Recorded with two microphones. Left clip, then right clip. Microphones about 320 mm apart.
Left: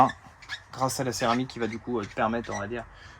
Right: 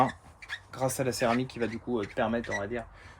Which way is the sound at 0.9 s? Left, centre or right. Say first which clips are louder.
Left 1 dB; centre.